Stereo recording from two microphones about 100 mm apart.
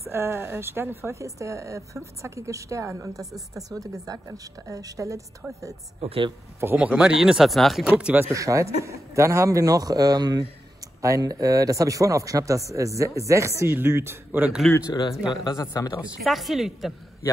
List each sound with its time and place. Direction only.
0.0 s a woman's voice: 25° right (ahead or behind)
5.4 s speech: 15° right (ahead or behind)
5.9 s speech: 75° right (ahead or behind)
6.6 s speech: 15° right (ahead or behind); by 7.8 s centre (ahead or behind)
7.8 s speech: 15° right (ahead or behind)
8.3 s speech: 30° right (ahead or behind)
15.5 s speech: 30° left (ahead or behind)
16.2 s speech: centre (ahead or behind)